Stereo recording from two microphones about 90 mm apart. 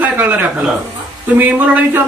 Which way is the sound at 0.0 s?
20° right (ahead or behind).